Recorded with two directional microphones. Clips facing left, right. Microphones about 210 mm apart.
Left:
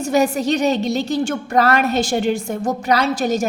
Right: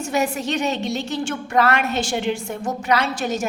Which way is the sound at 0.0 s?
35° left (ahead or behind).